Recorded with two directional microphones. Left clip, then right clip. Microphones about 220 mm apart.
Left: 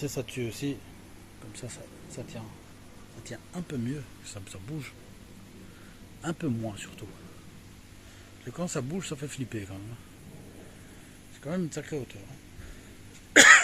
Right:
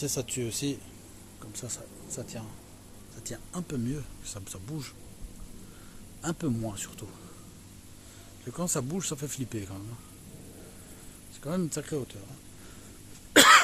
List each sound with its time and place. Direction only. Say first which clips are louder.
0.0 s speech: right 1 dB; 5° right (ahead or behind)
6.2 s speech: even; 10° right (ahead or behind)
8.5 s speech: right 1 dB; 15° right (ahead or behind)
11.4 s speech: right 1 dB; 15° right (ahead or behind)
13.3 s cough: left 2 dB; 10° right (ahead or behind)